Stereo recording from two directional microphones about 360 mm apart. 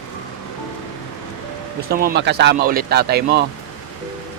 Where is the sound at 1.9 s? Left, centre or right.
Right.